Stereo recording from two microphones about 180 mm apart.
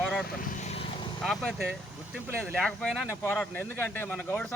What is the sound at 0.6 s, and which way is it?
Vehicle, 35° left (ahead or behind).